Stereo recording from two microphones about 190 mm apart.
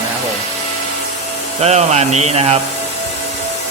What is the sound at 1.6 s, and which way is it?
Speech, 35° right (ahead or behind).